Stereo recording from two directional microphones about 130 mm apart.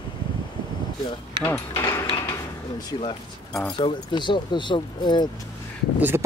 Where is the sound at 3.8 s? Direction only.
35° left (ahead or behind).